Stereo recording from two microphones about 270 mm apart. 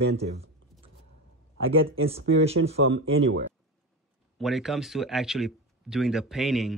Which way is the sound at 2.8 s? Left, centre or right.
Right.